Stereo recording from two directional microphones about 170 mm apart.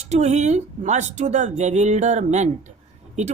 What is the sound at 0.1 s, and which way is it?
Speech, 40° right (ahead or behind).